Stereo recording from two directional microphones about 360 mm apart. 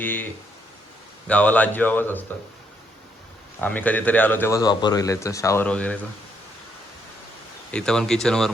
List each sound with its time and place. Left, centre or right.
0.0 s speech: centre
1.3 s speech: centre
3.6 s speech: centre
7.7 s speech: centre